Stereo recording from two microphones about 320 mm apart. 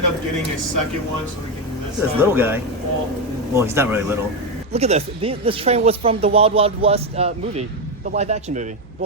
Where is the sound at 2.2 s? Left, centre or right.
Centre.